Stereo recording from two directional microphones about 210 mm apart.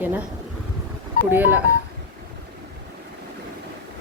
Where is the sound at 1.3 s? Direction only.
10° right (ahead or behind).